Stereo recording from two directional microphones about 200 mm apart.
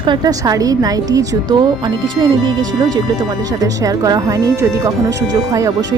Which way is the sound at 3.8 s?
20° right (ahead or behind).